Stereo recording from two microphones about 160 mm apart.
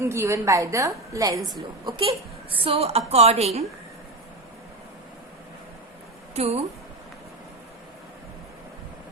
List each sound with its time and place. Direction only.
0.0 s a woman's voice: 15° right (ahead or behind)
2.6 s a woman's voice: 35° right (ahead or behind)
6.3 s a woman's voice: 40° right (ahead or behind)